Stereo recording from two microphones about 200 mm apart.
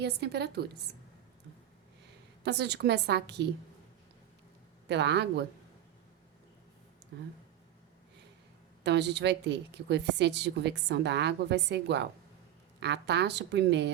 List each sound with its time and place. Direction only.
0.0 s a woman's voice: 55° right (ahead or behind)
2.4 s a woman's voice: 55° right (ahead or behind)
4.9 s a woman's voice: 60° right (ahead or behind)
8.8 s a woman's voice: 60° right (ahead or behind)